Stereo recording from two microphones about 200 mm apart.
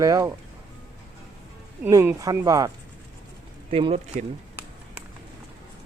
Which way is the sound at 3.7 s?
30° right (ahead or behind).